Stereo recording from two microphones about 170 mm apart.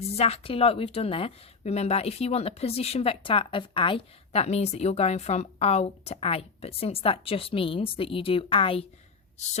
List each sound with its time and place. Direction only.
0.0 s a woman's voice: 35° left (ahead or behind)